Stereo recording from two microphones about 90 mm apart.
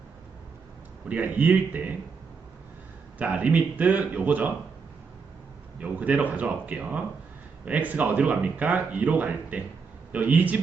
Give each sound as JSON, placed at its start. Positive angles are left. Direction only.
{"t": 1.0, "sound": "speech", "side_deg": -15}
{"t": 3.2, "sound": "speech", "side_deg": -15}
{"t": 5.8, "sound": "speech", "side_deg": -15}